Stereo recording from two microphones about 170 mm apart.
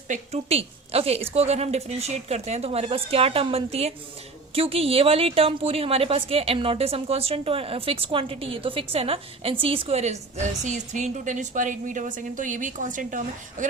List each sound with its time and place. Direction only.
0.1 s speech: 40° right (ahead or behind)